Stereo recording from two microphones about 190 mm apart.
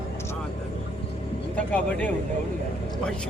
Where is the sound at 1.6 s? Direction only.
5° left (ahead or behind).